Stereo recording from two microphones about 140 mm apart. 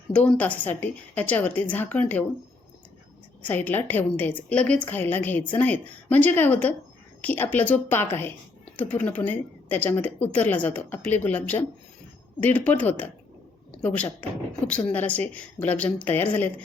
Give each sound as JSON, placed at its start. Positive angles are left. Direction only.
{"t": 0.1, "sound": "a woman's voice", "side_deg": 10}
{"t": 3.4, "sound": "a woman's voice", "side_deg": 10}